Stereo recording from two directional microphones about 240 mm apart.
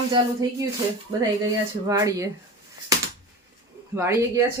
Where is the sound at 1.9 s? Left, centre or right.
Centre.